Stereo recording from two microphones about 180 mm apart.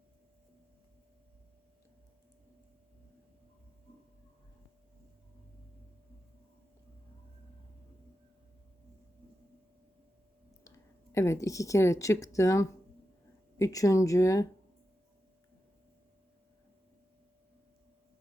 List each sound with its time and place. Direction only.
11.1 s speech: 15° left (ahead or behind)